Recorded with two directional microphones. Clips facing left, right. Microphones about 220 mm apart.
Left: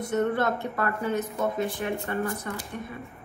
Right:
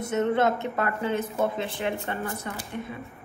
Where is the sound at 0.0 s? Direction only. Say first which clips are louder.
Right 2 dB; 25° right (ahead or behind).